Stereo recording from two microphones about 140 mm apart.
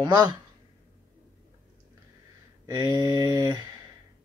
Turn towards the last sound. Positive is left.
turn(degrees=-25)  # may be behind; listen again after turning